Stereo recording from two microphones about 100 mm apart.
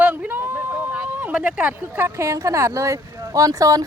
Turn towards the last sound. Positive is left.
turn(degrees=-35)  # may be behind; listen again after turning